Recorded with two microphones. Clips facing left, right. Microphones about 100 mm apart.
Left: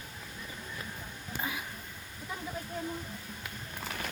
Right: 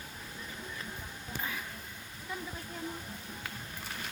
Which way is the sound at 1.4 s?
10° left (ahead or behind).